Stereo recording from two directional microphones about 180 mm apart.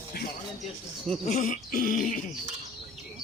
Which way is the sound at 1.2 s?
45° left (ahead or behind).